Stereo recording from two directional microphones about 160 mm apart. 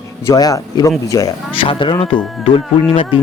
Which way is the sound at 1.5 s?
30° left (ahead or behind).